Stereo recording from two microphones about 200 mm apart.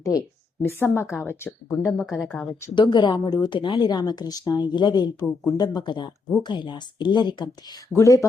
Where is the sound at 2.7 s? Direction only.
20° left (ahead or behind).